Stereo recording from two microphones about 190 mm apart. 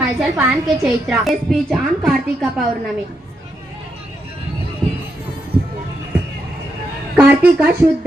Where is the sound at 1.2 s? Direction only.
Centre (ahead or behind).